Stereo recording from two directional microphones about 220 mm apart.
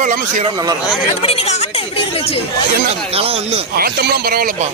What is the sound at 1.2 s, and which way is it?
Speech, 30° left (ahead or behind).